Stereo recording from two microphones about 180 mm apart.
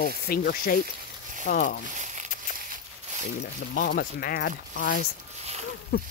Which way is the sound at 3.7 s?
55° left (ahead or behind).